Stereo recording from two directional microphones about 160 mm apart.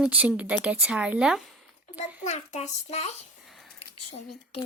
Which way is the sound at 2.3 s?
45° left (ahead or behind).